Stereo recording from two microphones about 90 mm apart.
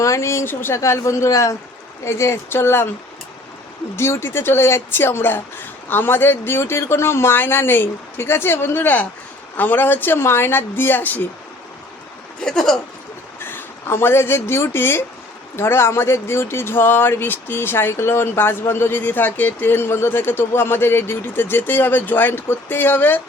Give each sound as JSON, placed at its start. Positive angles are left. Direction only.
{"t": 0.0, "sound": "a man's voice", "side_deg": 35}
{"t": 3.9, "sound": "a man's voice", "side_deg": 30}
{"t": 12.4, "sound": "speech", "side_deg": 5}
{"t": 13.4, "sound": "a man's voice", "side_deg": 25}